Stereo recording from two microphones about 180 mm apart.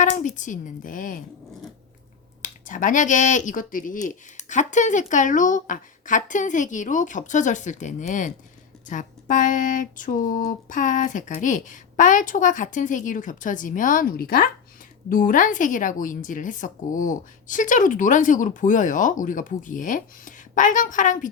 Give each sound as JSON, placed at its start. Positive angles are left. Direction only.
{"t": 0.0, "sound": "a woman's voice", "side_deg": 45}
{"t": 2.4, "sound": "a woman's voice", "side_deg": 45}